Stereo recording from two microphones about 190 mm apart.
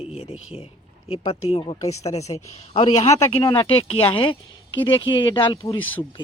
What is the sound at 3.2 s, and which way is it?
Speech, 15° left (ahead or behind).